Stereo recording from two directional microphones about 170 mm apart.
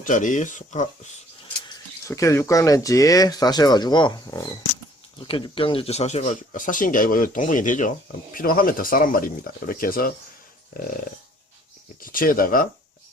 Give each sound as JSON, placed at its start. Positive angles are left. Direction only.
{"t": 0.0, "sound": "speech", "side_deg": 50}
{"t": 2.0, "sound": "speech", "side_deg": 15}
{"t": 11.9, "sound": "speech", "side_deg": 55}